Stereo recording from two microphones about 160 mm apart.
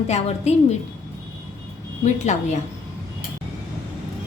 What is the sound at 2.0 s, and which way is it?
Speech, 45° left (ahead or behind).